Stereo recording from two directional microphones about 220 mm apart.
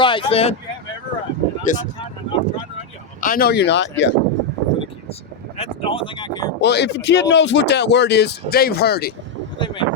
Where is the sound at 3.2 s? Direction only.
40° left (ahead or behind).